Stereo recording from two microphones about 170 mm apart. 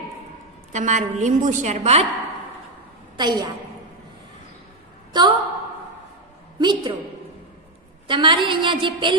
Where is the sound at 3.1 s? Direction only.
25° right (ahead or behind).